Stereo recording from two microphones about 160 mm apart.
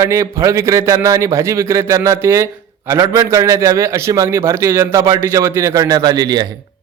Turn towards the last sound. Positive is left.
turn(degrees=-25)  # may be behind; listen again after turning